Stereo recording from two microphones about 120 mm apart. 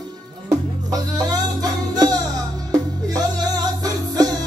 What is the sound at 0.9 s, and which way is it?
Music, 35° right (ahead or behind).